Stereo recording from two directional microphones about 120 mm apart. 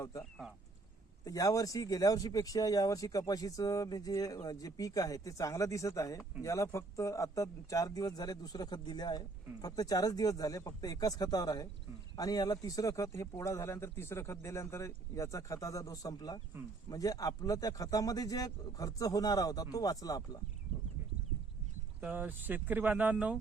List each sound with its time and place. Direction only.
0.2 s speech: centre (ahead or behind)
1.2 s speech: 30° left (ahead or behind)
22.0 s speech: 15° right (ahead or behind)